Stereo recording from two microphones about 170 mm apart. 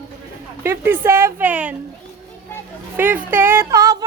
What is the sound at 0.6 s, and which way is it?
Speech, 15° right (ahead or behind).